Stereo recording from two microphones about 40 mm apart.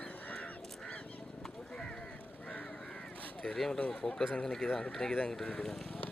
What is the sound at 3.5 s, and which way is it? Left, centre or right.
Speech, centre.